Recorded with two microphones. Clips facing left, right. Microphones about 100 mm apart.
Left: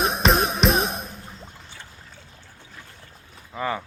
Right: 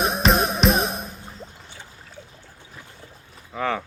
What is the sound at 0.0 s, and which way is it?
Music, centre (ahead or behind).